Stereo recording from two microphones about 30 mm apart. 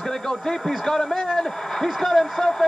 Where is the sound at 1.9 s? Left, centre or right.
Centre.